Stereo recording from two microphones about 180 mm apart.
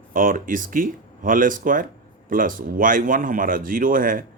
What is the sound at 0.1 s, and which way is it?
Speech, 50° right (ahead or behind).